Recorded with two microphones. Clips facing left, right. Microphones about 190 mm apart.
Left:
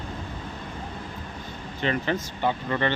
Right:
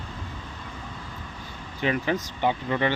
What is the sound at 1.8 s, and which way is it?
Speech, 10° right (ahead or behind).